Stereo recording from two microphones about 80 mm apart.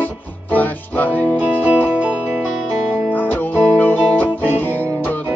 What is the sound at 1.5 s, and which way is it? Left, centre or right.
Music, centre.